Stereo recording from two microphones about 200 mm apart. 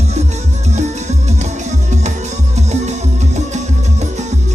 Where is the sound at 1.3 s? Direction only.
35° right (ahead or behind).